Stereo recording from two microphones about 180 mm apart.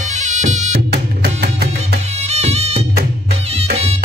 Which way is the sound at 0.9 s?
60° right (ahead or behind).